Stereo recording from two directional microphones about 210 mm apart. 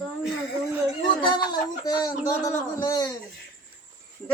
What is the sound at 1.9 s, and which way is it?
A man's voice, 15° left (ahead or behind).